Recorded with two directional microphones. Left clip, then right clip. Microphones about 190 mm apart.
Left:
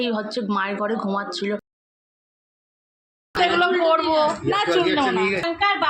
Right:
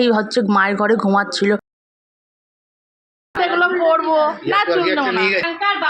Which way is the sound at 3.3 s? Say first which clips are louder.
Right 2 dB; 10° left (ahead or behind).